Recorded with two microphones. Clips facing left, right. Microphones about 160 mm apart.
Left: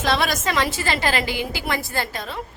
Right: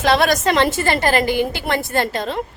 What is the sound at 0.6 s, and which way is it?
A woman's voice, 50° right (ahead or behind).